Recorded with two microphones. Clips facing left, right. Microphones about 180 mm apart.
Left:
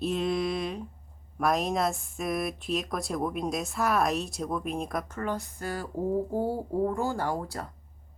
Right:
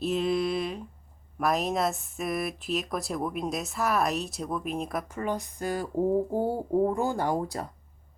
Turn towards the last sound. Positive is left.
turn(degrees=-20)  # may be behind; listen again after turning